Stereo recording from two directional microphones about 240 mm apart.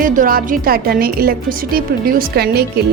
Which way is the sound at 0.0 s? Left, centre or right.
Right.